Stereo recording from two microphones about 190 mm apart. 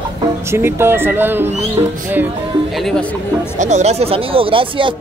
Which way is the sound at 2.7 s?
5° left (ahead or behind).